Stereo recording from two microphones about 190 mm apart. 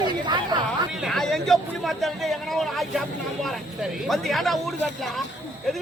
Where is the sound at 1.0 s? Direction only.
Centre (ahead or behind).